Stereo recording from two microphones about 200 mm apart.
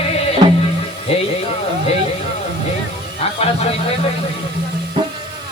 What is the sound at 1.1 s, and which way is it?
Music, 30° left (ahead or behind).